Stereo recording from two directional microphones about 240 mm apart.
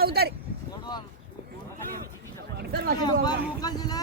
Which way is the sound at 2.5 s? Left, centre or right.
Right.